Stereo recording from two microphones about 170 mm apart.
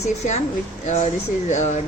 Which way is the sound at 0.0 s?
40° left (ahead or behind).